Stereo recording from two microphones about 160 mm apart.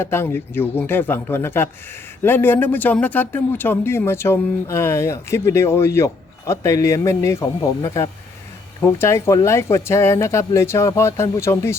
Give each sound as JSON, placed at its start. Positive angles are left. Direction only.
{"t": 0.0, "sound": "speech", "side_deg": 15}